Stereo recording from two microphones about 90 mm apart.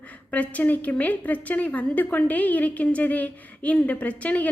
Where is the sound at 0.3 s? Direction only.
15° left (ahead or behind).